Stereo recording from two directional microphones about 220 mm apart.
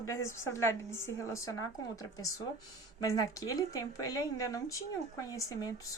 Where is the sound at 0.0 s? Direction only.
15° left (ahead or behind).